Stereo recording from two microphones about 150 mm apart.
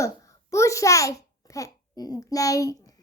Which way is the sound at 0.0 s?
20° left (ahead or behind).